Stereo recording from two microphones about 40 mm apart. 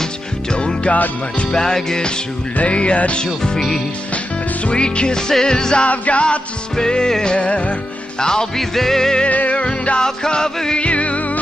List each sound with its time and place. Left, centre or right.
0.5 s music: left
2.5 s music: left
3.4 s music: centre
4.6 s music: left
5.9 s music: left
6.8 s music: centre
7.3 s music: left
8.2 s music: centre
9.2 s music: left; by 10.8 s centre
10.8 s music: left